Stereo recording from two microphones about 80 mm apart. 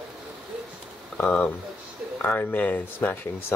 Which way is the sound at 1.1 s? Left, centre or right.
Centre.